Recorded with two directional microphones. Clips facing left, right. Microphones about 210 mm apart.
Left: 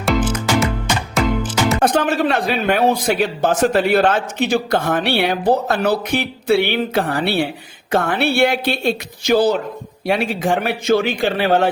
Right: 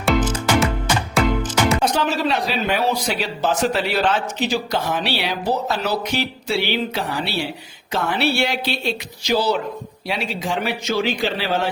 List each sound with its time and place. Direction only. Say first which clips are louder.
0.0 s music: left 1 dB; centre (ahead or behind)
1.8 s speech: left 4 dB; 55° left (ahead or behind)